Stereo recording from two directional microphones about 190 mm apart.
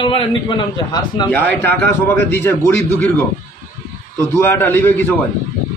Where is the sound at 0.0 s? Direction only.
25° left (ahead or behind).